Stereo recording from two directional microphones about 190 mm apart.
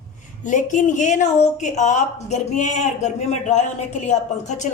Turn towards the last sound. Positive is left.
turn(degrees=40)  # may be behind; listen again after turning